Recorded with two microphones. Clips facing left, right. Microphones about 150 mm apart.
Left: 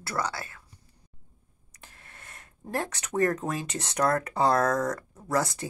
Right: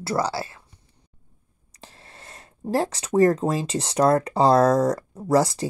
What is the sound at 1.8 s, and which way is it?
Speech, 30° right (ahead or behind).